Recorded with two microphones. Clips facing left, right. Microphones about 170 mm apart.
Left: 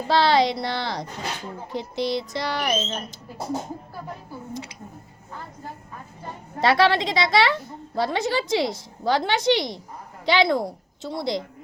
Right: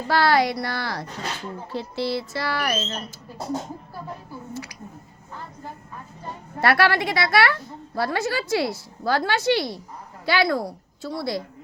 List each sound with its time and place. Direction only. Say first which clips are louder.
0.1 s a woman's voice: left 1 dB; 20° left (ahead or behind)
4.5 s a woman's voice: even; 25° left (ahead or behind)
6.6 s a woman's voice: left 1 dB; 20° left (ahead or behind)